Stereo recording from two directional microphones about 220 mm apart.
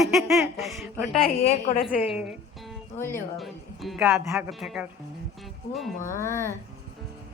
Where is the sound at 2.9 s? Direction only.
10° left (ahead or behind).